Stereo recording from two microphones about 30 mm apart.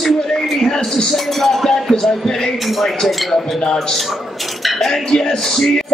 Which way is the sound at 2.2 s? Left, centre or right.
Centre.